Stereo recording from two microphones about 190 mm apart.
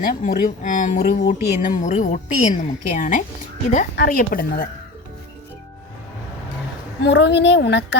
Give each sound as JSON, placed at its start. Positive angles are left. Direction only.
{"t": 0.0, "sound": "a woman's voice", "side_deg": 45}
{"t": 7.0, "sound": "a woman's voice", "side_deg": 65}